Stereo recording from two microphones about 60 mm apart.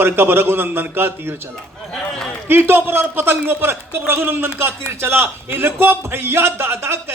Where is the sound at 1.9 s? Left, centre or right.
Centre.